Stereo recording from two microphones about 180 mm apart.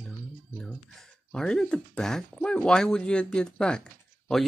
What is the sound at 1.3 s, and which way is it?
Speech, 5° left (ahead or behind).